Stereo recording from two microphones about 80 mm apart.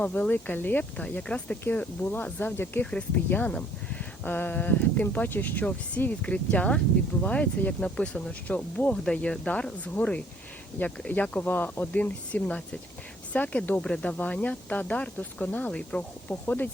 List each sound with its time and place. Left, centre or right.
0.0 s speech: centre